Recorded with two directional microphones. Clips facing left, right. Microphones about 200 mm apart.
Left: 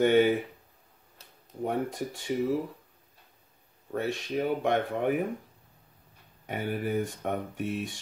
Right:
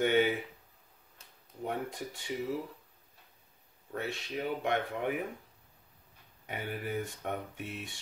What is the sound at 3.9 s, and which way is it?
Speech, 45° left (ahead or behind).